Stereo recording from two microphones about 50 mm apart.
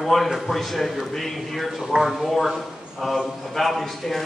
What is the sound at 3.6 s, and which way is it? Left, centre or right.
Speech, centre.